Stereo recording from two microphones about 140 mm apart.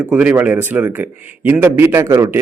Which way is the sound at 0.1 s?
10° right (ahead or behind).